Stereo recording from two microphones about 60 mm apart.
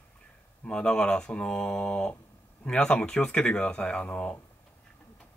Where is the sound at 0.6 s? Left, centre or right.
Centre.